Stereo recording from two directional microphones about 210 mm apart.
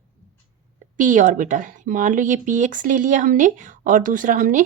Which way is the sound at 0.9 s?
40° right (ahead or behind).